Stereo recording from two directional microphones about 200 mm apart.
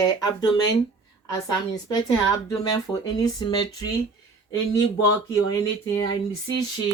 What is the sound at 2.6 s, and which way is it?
Speech, 20° left (ahead or behind).